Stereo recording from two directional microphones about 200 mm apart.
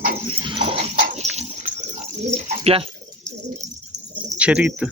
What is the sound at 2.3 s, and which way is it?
Bird, 30° right (ahead or behind).